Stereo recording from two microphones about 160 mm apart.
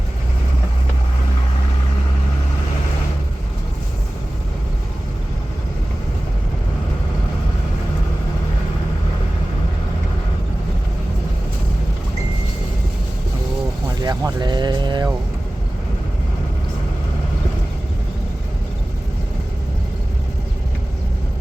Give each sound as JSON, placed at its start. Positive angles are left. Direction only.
{"t": 14.0, "sound": "vehicle", "side_deg": -25}